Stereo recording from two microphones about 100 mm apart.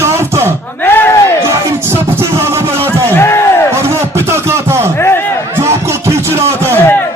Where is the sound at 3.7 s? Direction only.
25° right (ahead or behind).